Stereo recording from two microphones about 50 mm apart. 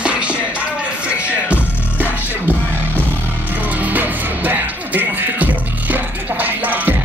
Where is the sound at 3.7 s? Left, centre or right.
Right.